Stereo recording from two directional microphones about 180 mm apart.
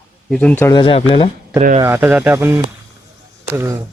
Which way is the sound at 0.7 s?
30° left (ahead or behind).